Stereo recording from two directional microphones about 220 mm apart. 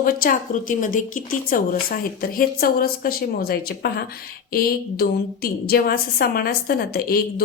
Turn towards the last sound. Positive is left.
turn(degrees=45)  # may be behind; listen again after turning